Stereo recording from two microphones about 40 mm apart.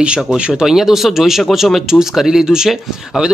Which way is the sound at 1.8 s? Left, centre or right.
Centre.